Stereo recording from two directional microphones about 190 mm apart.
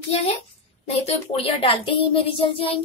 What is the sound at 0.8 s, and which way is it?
A child's voice, 35° left (ahead or behind).